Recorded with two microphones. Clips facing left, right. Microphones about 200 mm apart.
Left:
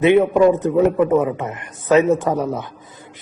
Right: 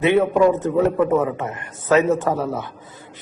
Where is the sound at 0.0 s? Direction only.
15° left (ahead or behind).